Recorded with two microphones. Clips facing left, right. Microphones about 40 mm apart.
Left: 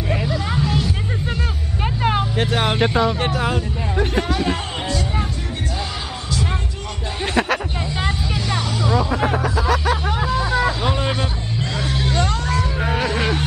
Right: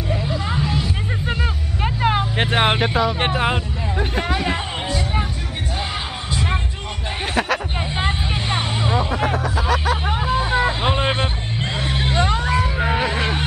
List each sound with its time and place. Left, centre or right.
0.5 s music: centre
1.8 s vehicle: centre
2.3 s vehicle: right
2.8 s speech: centre
3.2 s speech: right
3.9 s hubbub: centre
4.2 s music: centre
7.3 s a sound: centre
7.9 s vehicle: right
9.6 s a sound: centre
10.0 s vehicle: right